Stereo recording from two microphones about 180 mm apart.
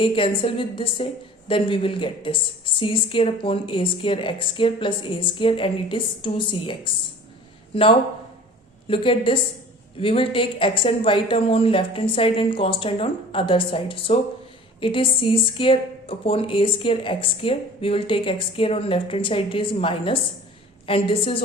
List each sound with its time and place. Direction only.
0.0 s a woman's voice: 30° left (ahead or behind)